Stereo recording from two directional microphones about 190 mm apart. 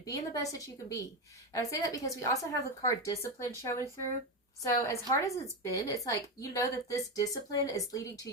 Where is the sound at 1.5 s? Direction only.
15° left (ahead or behind).